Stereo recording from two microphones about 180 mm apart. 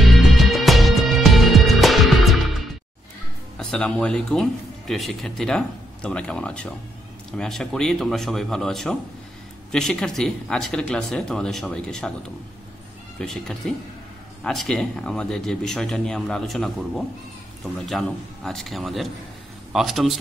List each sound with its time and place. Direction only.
0.0 s music: centre (ahead or behind)
3.5 s speech: 5° left (ahead or behind)
13.2 s speech: 5° left (ahead or behind)